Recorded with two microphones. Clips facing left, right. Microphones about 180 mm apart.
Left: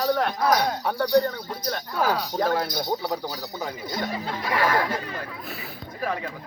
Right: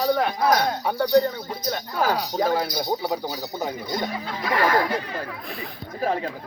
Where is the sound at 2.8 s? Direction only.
15° right (ahead or behind).